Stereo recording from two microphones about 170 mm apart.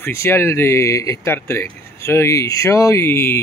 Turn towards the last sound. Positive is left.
turn(degrees=15)  # may be behind; listen again after turning